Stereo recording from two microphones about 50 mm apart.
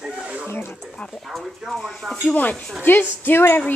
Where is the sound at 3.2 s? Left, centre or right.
Left.